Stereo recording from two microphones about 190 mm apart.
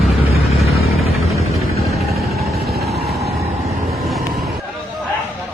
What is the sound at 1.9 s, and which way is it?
Vehicle, centre (ahead or behind).